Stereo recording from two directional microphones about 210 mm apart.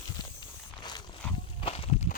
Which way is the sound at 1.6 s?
30° left (ahead or behind).